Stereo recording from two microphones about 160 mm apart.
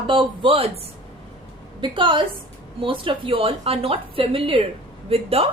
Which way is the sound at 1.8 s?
30° right (ahead or behind).